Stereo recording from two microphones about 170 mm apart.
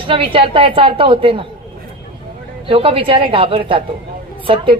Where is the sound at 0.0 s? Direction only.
30° right (ahead or behind).